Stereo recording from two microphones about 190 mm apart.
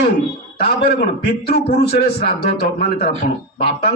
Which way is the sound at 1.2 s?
55° left (ahead or behind).